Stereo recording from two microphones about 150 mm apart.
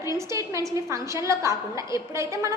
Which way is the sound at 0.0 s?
20° right (ahead or behind).